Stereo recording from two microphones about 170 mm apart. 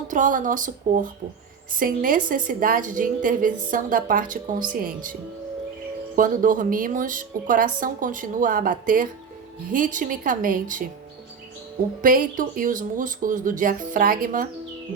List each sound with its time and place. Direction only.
0.1 s a woman's voice: 50° right (ahead or behind)
6.1 s a woman's voice: 50° right (ahead or behind)
12.0 s a woman's voice: 50° right (ahead or behind)